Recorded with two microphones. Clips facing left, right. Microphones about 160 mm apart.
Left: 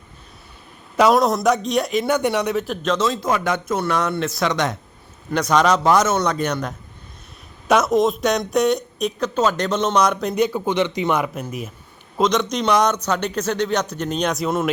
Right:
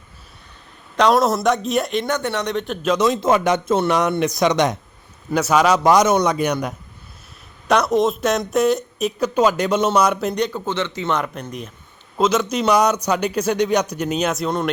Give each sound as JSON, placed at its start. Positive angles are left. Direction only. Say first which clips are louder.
{"t": 0.9, "sound": "speech", "louder": "even", "side_deg": 5}
{"t": 2.8, "sound": "a man's voice", "louder": "right 5 dB", "side_deg": -15}
{"t": 5.3, "sound": "a man's voice", "louder": "right 1 dB", "side_deg": -10}
{"t": 7.7, "sound": "a man's voice", "louder": "even", "side_deg": 0}